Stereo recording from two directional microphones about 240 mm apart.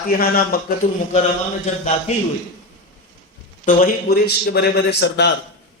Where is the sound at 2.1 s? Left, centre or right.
Left.